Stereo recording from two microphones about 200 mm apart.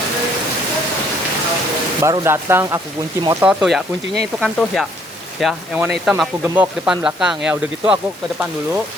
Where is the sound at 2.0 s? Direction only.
15° right (ahead or behind).